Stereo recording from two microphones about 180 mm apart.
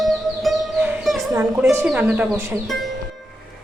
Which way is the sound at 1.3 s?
15° right (ahead or behind).